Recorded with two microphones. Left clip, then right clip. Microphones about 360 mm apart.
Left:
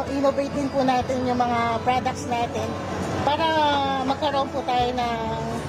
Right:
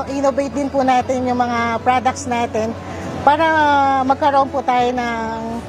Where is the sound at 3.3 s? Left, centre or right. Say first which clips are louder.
Right 7 dB; right.